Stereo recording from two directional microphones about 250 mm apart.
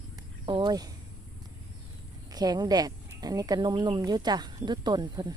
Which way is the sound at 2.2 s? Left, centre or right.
Centre.